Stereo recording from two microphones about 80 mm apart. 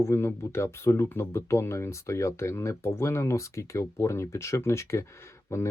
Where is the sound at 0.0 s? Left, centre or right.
Left.